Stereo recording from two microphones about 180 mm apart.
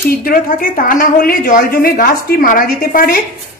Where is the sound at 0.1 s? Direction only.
55° left (ahead or behind).